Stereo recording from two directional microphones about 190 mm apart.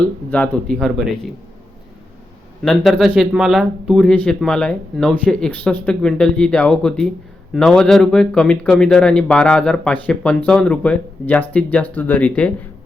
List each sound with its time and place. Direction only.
0.3 s speech: 10° left (ahead or behind)
2.6 s speech: centre (ahead or behind)